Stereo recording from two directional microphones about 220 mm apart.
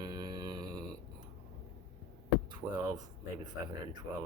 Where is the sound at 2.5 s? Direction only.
20° right (ahead or behind).